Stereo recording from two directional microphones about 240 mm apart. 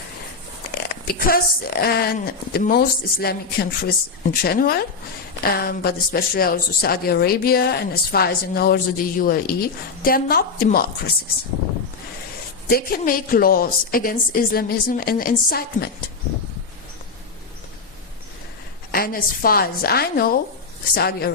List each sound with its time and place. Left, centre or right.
1.0 s speech: left
12.6 s speech: left
18.9 s speech: left